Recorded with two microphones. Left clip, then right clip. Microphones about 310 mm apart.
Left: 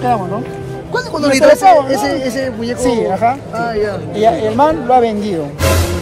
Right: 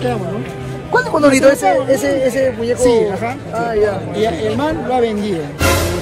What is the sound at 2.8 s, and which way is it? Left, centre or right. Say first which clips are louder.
Speech: left 1 dB; centre.